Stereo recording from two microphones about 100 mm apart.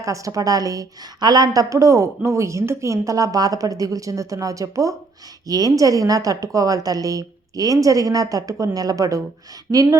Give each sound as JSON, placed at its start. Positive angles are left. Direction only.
{"t": 0.0, "sound": "a woman's voice", "side_deg": -35}
{"t": 9.7, "sound": "speech", "side_deg": -20}